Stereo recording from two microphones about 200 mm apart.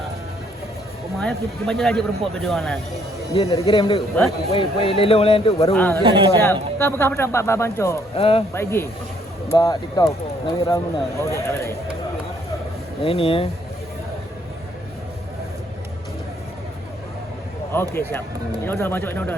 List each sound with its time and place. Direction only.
1.2 s a man's voice: centre (ahead or behind)
3.3 s speech: 25° left (ahead or behind)
5.7 s speech: 10° left (ahead or behind)
6.0 s speech: 25° right (ahead or behind)
6.4 s speech: 10° left (ahead or behind)
8.1 s speech: 30° left (ahead or behind)
8.5 s speech: 10° left (ahead or behind)
13.0 s speech: 30° left (ahead or behind)
18.6 s speech: 10° left (ahead or behind)